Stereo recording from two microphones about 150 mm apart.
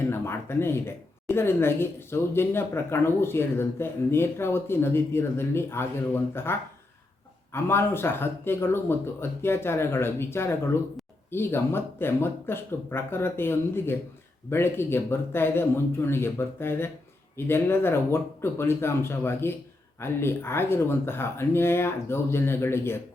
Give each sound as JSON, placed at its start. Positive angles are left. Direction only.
{"t": 0.1, "sound": "a woman's voice", "side_deg": 15}